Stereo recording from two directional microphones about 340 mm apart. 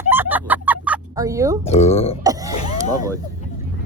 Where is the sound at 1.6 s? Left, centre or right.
Centre.